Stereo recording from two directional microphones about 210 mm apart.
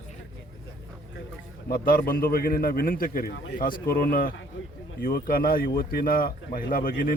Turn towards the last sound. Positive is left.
turn(degrees=40)  # may be behind; listen again after turning